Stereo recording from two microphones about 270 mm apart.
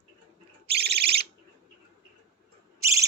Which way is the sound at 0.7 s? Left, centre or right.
Right.